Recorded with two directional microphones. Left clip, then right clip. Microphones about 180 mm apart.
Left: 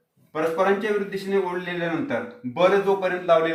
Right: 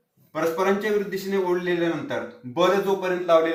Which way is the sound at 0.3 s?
20° left (ahead or behind).